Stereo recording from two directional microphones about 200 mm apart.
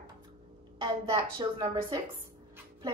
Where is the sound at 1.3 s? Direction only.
20° right (ahead or behind).